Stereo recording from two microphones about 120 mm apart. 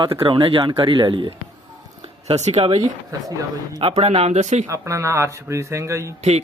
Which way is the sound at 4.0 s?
60° right (ahead or behind).